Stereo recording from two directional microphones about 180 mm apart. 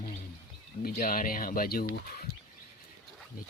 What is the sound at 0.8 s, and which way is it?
Speech, 50° left (ahead or behind).